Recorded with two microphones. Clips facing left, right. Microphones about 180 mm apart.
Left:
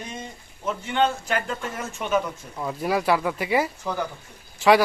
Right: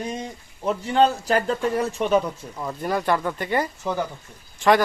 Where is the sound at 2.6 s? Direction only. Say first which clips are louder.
Left 1 dB; 5° left (ahead or behind).